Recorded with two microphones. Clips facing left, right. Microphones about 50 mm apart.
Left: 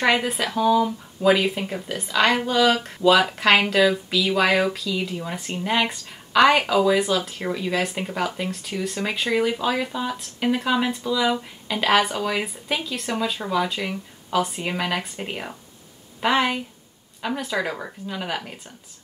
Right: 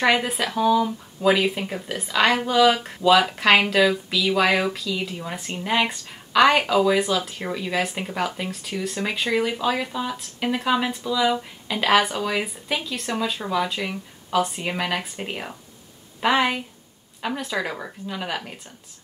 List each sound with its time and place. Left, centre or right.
0.0 s speech: centre